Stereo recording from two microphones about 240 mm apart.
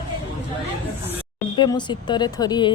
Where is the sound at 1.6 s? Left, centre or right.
Centre.